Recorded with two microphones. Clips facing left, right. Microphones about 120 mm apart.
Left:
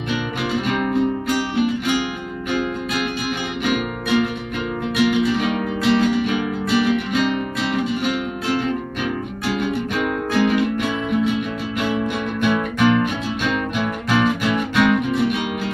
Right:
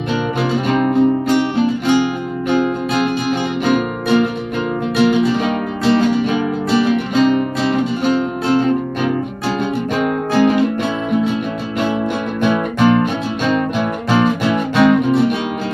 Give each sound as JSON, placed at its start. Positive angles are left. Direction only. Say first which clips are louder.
{"t": 0.5, "sound": "music", "louder": "right 4 dB", "side_deg": -35}
{"t": 12.4, "sound": "music", "louder": "right 3 dB", "side_deg": -30}